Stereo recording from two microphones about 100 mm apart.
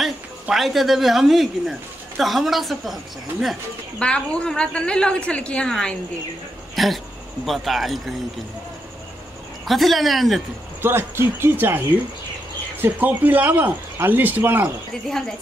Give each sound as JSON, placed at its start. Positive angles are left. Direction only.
{"t": 0.0, "sound": "speech", "side_deg": 0}
{"t": 4.0, "sound": "a woman's voice", "side_deg": 10}
{"t": 6.7, "sound": "dog", "side_deg": 0}
{"t": 7.4, "sound": "speech", "side_deg": 0}
{"t": 9.7, "sound": "speech", "side_deg": 0}
{"t": 10.8, "sound": "speech", "side_deg": -25}
{"t": 12.8, "sound": "speech", "side_deg": -20}